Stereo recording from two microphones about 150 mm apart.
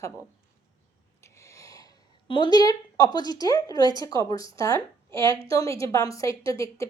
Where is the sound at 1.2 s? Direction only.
20° left (ahead or behind).